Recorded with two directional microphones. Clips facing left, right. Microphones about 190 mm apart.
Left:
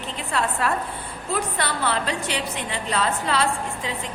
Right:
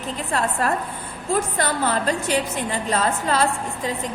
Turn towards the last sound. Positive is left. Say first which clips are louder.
# right 2 dB
turn(degrees=-40)  # may be behind; listen again after turning